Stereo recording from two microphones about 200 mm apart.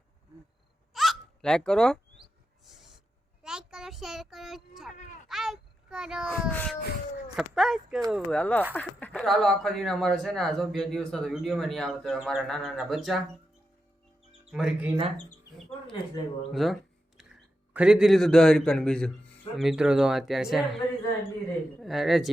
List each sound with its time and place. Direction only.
0.9 s hiccup: centre (ahead or behind)
2.6 s a sound: centre (ahead or behind)
5.3 s a child's voice: centre (ahead or behind)
6.5 s a sound: 10° left (ahead or behind)
7.3 s speech: centre (ahead or behind)
14.5 s speech: 5° right (ahead or behind)
15.9 s speech: 25° left (ahead or behind)
16.5 s speech: centre (ahead or behind)
17.2 s music: centre (ahead or behind)
17.7 s speech: 5° right (ahead or behind)